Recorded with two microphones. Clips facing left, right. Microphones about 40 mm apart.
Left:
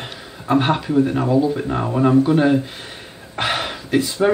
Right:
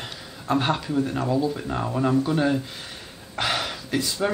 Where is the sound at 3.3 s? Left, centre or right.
Left.